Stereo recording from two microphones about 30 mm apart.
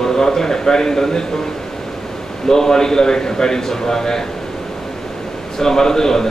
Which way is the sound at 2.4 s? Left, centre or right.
Centre.